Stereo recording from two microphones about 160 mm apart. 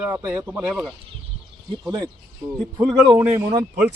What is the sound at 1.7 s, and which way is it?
A man's voice, 25° right (ahead or behind).